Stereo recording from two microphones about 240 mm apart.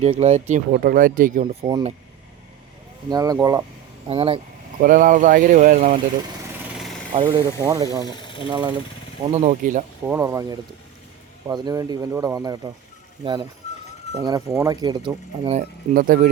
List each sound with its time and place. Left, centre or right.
0.0 s speech: right
1.6 s speech: centre
3.1 s speech: centre
4.1 s speech: right
4.8 s speech: right
7.1 s speech: right
8.1 s a sound: centre
8.4 s speech: centre
10.1 s speech: centre
14.2 s speech: centre; by 16.3 s right